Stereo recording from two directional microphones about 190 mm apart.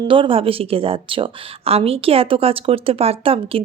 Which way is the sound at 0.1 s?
30° right (ahead or behind).